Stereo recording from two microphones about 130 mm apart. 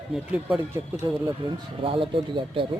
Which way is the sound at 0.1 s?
10° right (ahead or behind).